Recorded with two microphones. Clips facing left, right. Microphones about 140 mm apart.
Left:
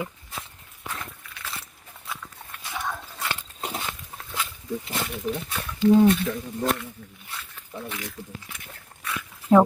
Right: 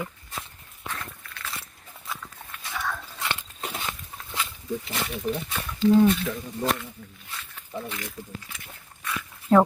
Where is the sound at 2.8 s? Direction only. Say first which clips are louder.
Even; 20° left (ahead or behind).